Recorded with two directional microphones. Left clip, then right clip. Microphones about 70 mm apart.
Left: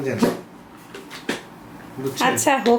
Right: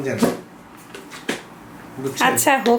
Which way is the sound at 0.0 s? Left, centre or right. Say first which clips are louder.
Right 1 dB; centre.